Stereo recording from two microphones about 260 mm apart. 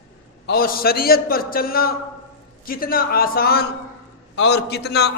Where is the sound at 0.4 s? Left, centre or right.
Left.